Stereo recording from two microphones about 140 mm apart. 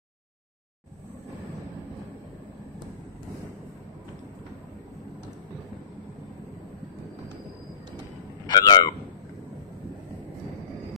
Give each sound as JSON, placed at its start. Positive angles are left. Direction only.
{"t": 8.5, "sound": "speech", "side_deg": 30}